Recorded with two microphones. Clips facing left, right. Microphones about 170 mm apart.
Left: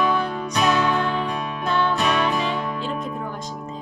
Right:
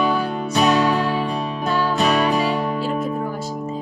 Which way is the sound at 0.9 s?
5° right (ahead or behind).